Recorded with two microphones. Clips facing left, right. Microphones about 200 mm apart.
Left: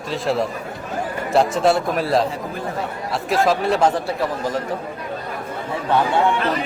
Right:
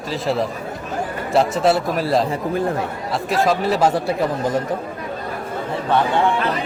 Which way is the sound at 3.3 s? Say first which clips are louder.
Even; centre (ahead or behind).